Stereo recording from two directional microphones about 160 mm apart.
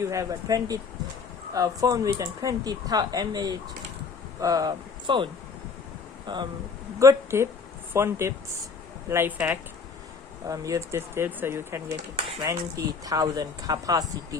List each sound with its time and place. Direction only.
0.0 s speech: 20° right (ahead or behind)
7.0 s speech: 20° right (ahead or behind)